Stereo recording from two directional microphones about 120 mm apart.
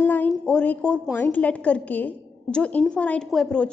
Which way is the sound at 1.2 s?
15° left (ahead or behind).